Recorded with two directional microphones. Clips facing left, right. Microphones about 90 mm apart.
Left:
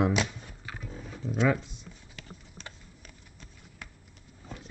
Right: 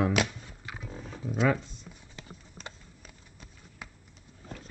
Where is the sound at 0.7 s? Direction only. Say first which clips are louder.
Right 1 dB; 5° right (ahead or behind).